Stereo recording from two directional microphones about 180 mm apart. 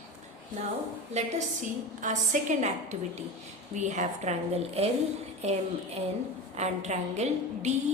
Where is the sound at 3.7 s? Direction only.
40° right (ahead or behind).